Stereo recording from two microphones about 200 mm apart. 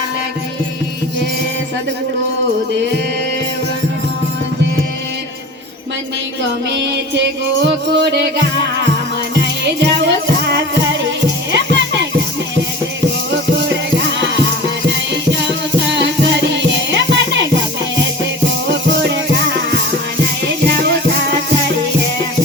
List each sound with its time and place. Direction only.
6.7 s music: 60° right (ahead or behind)
15.9 s music: 60° right (ahead or behind)
18.7 s music: 60° right (ahead or behind)